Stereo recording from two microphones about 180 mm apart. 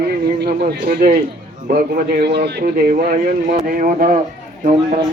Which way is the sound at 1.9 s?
60° right (ahead or behind).